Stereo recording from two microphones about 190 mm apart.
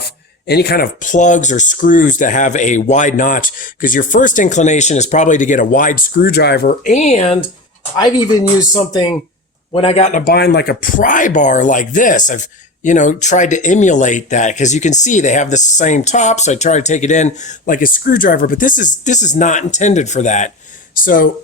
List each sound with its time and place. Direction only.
0.4 s speech: 55° left (ahead or behind); by 7.3 s 35° left (ahead or behind)
7.9 s speech: 20° left (ahead or behind)
9.7 s speech: 30° left (ahead or behind)